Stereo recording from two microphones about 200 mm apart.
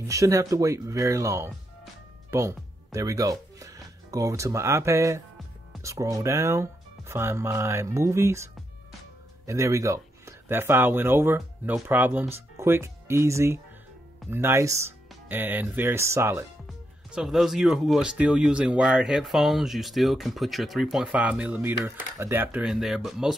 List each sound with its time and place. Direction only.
0.1 s speech: 15° right (ahead or behind)
9.5 s speech: 15° right (ahead or behind)